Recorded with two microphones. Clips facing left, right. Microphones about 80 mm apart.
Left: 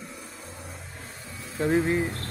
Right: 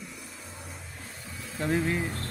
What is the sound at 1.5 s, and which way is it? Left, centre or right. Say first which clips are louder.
Speech: left 4 dB; left.